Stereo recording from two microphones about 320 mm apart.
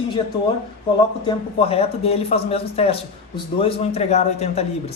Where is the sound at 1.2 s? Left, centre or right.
Centre.